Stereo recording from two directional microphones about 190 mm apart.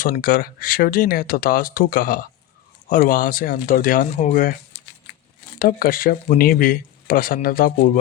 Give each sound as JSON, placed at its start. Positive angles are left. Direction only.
{"t": 0.0, "sound": "speech", "side_deg": 50}
{"t": 5.5, "sound": "speech", "side_deg": 50}